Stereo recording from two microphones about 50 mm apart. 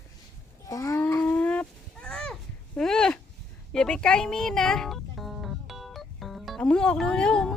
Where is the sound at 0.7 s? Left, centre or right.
Left.